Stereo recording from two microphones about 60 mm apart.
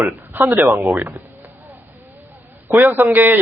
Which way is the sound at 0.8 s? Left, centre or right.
Right.